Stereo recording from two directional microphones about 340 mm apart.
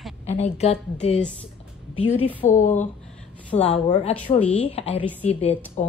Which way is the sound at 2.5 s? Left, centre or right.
Left.